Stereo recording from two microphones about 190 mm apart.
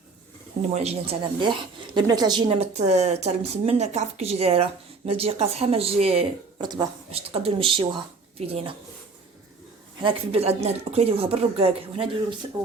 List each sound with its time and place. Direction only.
0.8 s speech: 30° right (ahead or behind)
10.0 s speech: 30° right (ahead or behind)